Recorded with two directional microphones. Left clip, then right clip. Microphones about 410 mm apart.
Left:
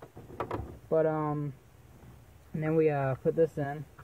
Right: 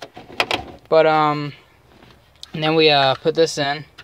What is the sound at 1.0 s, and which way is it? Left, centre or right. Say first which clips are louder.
Speech: right 15 dB; centre.